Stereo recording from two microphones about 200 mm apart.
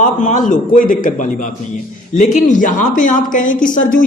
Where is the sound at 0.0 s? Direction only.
40° left (ahead or behind).